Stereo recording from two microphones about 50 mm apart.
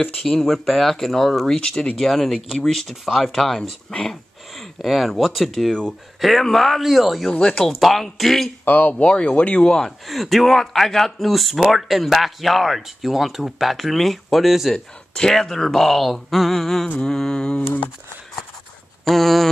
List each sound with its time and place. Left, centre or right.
0.0 s speech: centre
4.6 s speech: centre
7.2 s speech: centre
7.7 s speech: centre
8.6 s speech: left
8.9 s speech: centre
9.7 s speech: centre
15.1 s speech: centre
19.0 s speech: centre